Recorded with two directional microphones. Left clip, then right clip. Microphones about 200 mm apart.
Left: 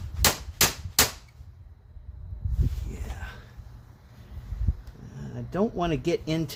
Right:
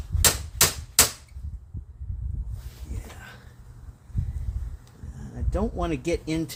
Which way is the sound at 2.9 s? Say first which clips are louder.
Left 1 dB; 40° left (ahead or behind).